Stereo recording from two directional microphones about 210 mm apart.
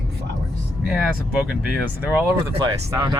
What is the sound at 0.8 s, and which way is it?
Speech, centre (ahead or behind).